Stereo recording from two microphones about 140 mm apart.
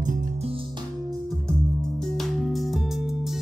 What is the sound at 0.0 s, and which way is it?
Music, 60° right (ahead or behind).